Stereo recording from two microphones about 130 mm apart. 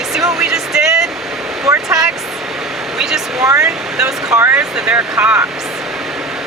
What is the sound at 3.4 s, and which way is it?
Speech, 25° right (ahead or behind).